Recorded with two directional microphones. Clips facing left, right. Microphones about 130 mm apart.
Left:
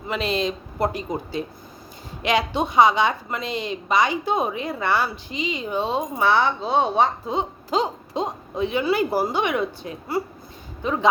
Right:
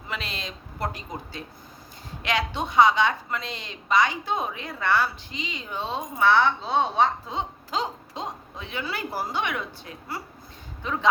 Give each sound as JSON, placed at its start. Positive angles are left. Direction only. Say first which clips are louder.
{"t": 0.1, "sound": "a woman's voice", "louder": "left 11 dB", "side_deg": 20}